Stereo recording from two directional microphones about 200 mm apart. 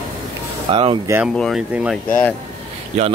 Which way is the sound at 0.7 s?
25° right (ahead or behind).